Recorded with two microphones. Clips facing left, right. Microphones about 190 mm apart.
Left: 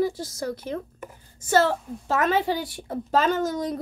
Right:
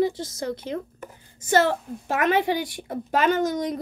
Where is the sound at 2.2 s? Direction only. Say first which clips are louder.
Right 2 dB; 65° right (ahead or behind).